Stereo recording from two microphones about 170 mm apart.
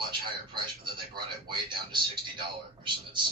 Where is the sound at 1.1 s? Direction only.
30° right (ahead or behind).